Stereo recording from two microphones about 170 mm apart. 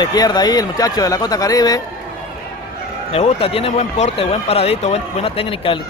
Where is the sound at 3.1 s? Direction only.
35° left (ahead or behind).